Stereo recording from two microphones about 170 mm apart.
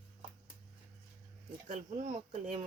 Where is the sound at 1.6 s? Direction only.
45° right (ahead or behind).